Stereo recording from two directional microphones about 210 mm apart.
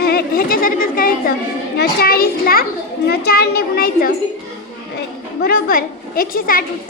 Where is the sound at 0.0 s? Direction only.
50° left (ahead or behind).